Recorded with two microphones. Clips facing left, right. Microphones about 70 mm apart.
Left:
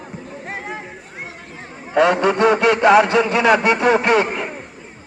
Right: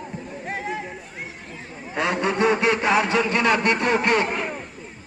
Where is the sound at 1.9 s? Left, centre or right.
Left.